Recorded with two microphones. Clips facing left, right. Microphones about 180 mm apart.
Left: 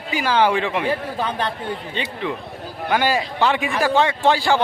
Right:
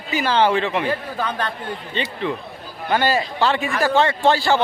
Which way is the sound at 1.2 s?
20° left (ahead or behind).